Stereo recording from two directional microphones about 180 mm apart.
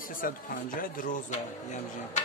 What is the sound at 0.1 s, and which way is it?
Speech, 50° left (ahead or behind).